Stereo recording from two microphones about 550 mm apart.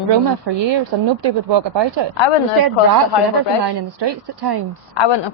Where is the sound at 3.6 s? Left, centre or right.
Right.